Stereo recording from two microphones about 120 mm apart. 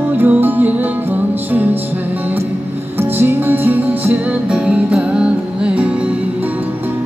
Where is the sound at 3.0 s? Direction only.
15° right (ahead or behind).